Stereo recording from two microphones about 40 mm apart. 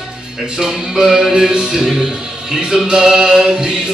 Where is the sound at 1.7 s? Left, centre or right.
Centre.